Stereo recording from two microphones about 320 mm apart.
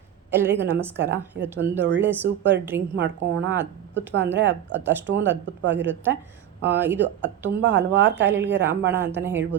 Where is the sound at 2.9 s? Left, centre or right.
Right.